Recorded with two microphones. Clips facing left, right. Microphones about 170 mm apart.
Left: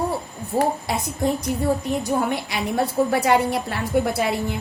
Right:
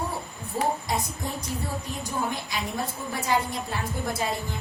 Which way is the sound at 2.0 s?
70° left (ahead or behind).